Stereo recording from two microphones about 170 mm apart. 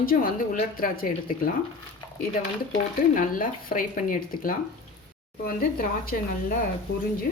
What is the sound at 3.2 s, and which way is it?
A woman's voice, 55° left (ahead or behind).